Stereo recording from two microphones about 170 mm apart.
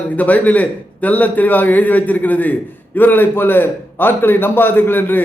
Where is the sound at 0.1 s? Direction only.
10° left (ahead or behind).